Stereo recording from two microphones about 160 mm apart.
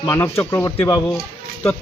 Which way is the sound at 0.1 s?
15° left (ahead or behind).